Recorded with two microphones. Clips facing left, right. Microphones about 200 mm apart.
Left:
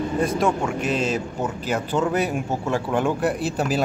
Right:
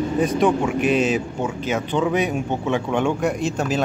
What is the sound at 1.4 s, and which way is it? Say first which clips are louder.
Speech: right 2 dB; centre (ahead or behind).